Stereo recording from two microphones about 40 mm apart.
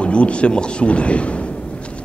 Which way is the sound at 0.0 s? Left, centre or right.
Left.